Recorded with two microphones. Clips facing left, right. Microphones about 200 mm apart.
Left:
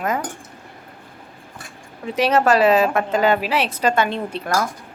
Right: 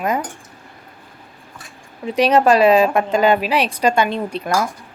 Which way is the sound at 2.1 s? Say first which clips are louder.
Right 3 dB; 15° right (ahead or behind).